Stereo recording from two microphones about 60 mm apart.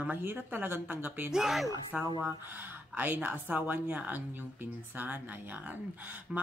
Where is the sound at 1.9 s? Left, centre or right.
Right.